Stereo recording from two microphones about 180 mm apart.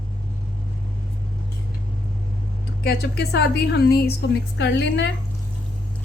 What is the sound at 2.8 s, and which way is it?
A woman's voice, 65° left (ahead or behind).